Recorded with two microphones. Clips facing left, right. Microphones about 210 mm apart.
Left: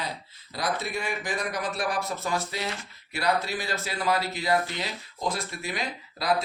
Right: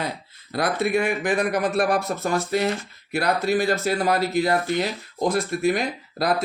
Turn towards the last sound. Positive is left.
turn(degrees=-50)  # may be behind; listen again after turning